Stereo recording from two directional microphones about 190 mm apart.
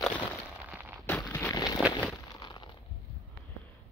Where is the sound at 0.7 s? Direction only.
10° right (ahead or behind).